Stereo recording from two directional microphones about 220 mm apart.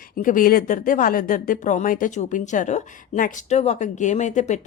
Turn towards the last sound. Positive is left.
turn(degrees=35)  # may be behind; listen again after turning